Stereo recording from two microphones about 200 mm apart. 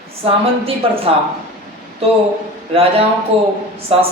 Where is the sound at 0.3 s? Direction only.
30° right (ahead or behind).